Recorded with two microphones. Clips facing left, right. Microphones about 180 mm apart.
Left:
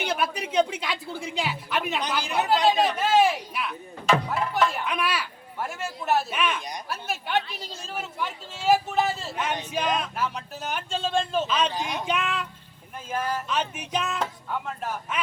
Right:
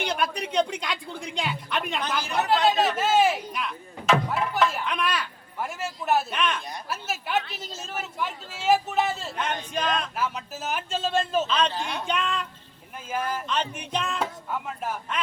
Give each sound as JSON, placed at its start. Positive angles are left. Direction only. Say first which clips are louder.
{"t": 0.0, "sound": "a man's voice", "louder": "even", "side_deg": 5}
{"t": 2.0, "sound": "speech", "louder": "left 1 dB", "side_deg": 15}
{"t": 2.5, "sound": "chop", "louder": "even", "side_deg": 0}
{"t": 7.5, "sound": "a man's voice", "louder": "even", "side_deg": 0}
{"t": 11.4, "sound": "a man's voice", "louder": "even", "side_deg": 10}